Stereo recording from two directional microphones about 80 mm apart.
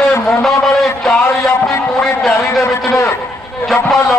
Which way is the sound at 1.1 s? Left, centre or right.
Left.